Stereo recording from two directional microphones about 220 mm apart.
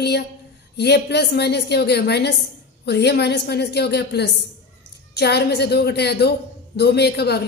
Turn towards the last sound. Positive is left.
turn(degrees=50)  # may be behind; listen again after turning